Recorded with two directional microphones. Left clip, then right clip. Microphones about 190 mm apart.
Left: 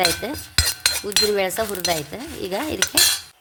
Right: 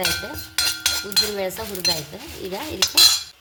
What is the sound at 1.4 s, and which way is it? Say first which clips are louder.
Cutlery: left 4 dB; 55° left (ahead or behind).